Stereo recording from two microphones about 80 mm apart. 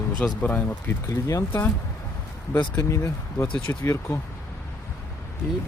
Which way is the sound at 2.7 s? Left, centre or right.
Left.